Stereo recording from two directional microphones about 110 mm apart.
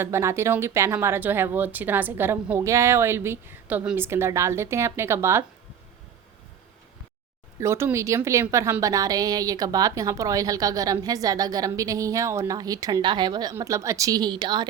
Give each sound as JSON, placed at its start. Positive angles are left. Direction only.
{"t": 0.0, "sound": "a woman's voice", "side_deg": -25}
{"t": 7.6, "sound": "a woman's voice", "side_deg": -25}